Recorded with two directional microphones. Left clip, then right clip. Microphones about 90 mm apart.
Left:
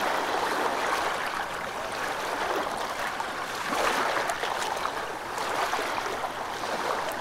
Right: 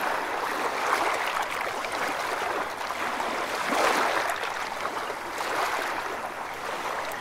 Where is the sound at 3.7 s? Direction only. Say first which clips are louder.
Right 2 dB; 15° right (ahead or behind).